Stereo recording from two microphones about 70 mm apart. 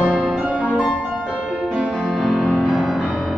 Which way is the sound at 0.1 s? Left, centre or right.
Centre.